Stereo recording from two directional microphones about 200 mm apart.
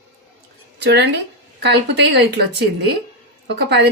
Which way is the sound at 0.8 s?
60° right (ahead or behind).